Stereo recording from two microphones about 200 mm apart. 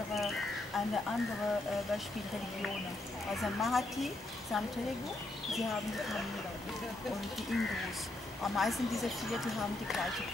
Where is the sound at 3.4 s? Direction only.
Centre (ahead or behind).